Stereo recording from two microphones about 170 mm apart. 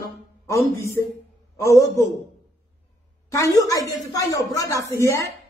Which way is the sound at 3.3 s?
20° left (ahead or behind).